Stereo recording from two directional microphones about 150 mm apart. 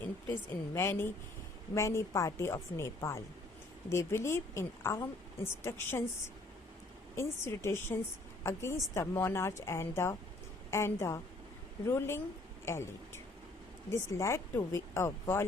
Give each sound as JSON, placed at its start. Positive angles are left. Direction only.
{"t": 0.7, "sound": "a woman's voice", "side_deg": 20}
{"t": 7.2, "sound": "a woman's voice", "side_deg": 15}
{"t": 13.9, "sound": "a woman's voice", "side_deg": 20}